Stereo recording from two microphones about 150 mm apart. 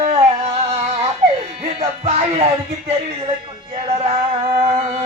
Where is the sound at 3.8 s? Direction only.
40° right (ahead or behind).